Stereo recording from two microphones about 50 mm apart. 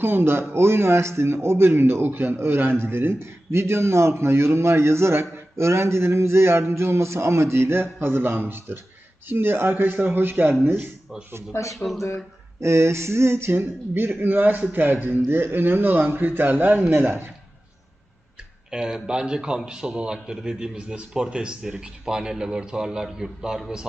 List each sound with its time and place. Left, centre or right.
0.0 s a man's voice: right
11.5 s speech: left
12.5 s a man's voice: right
13.9 s a man's voice: right
18.7 s a man's voice: centre